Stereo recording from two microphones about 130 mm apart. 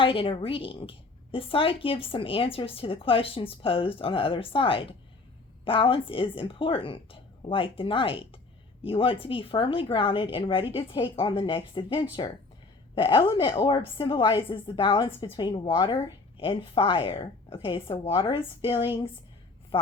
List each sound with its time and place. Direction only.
0.0 s a woman's voice: 40° left (ahead or behind)
13.3 s a woman's voice: 40° left (ahead or behind)